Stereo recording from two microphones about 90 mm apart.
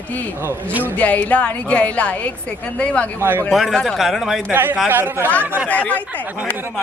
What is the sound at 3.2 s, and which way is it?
Speech, 25° right (ahead or behind).